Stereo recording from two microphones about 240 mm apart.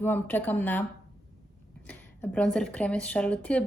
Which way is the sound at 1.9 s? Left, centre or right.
Centre.